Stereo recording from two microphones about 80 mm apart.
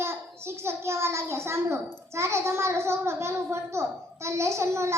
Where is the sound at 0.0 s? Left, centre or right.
Right.